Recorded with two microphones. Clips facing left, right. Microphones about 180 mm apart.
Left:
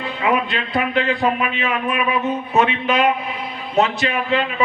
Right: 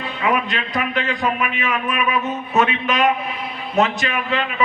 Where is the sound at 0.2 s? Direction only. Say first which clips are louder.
Left 1 dB; 30° left (ahead or behind).